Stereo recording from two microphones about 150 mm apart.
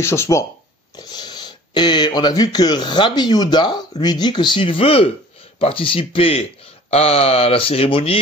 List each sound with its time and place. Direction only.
0.0 s speech: 20° left (ahead or behind); by 8.2 s 40° left (ahead or behind)